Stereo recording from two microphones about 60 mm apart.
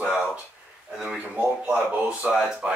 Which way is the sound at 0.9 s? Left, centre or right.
Centre.